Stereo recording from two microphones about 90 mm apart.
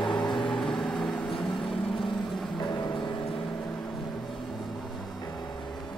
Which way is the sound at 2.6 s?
50° left (ahead or behind).